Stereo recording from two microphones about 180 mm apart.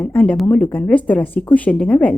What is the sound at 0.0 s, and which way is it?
Speech, 10° left (ahead or behind).